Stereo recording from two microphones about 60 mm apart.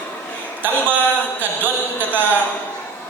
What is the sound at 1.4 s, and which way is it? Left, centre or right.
Speech, right.